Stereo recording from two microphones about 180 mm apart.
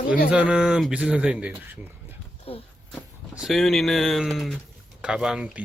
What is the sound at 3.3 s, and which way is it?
Speech, centre (ahead or behind).